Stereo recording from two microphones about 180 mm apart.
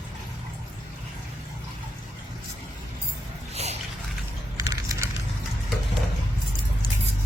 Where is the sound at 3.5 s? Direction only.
35° right (ahead or behind).